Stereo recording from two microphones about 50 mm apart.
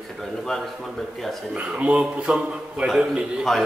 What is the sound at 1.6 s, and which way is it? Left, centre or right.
A man's voice, right.